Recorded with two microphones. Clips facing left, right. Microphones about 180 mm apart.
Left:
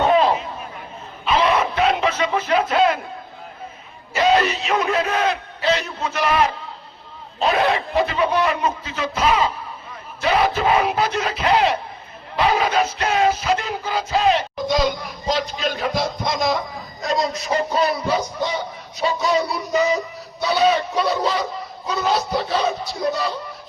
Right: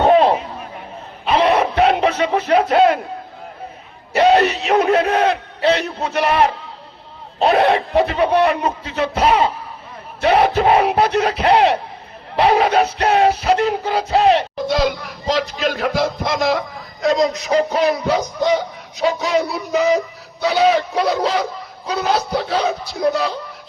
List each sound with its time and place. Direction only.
0.1 s a sound: 60° right (ahead or behind)
1.8 s music: 65° right (ahead or behind)
2.5 s speech: 65° right (ahead or behind)
4.1 s speech: 65° right (ahead or behind)
12.4 s music: 65° right (ahead or behind)